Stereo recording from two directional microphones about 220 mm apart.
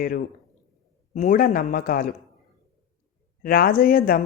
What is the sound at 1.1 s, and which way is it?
Speech, 35° left (ahead or behind).